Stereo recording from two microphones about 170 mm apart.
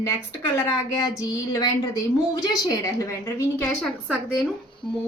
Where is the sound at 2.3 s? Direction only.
20° left (ahead or behind).